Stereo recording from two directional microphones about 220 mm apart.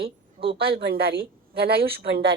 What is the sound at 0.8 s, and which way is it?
A woman's voice, 45° right (ahead or behind).